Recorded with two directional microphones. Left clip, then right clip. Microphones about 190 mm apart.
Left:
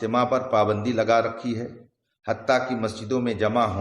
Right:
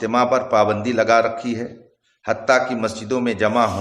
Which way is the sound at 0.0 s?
15° right (ahead or behind).